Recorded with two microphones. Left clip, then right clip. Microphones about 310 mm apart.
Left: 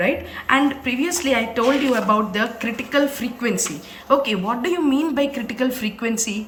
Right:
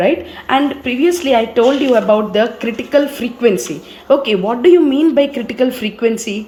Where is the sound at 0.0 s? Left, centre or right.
Centre.